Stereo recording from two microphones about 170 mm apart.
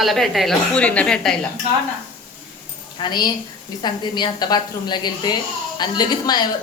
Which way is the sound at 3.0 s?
25° left (ahead or behind).